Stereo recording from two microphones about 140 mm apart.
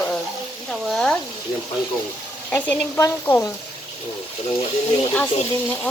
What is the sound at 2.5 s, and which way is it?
Speech, 10° left (ahead or behind).